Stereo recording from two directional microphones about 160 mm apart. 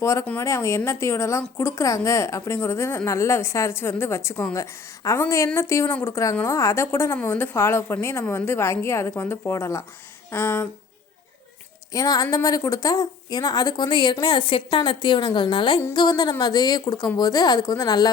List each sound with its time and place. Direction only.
0.0 s a woman's voice: 15° left (ahead or behind)
11.9 s a woman's voice: 25° left (ahead or behind)